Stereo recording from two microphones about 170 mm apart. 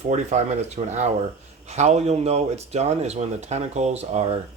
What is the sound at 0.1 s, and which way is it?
Speech, 40° right (ahead or behind).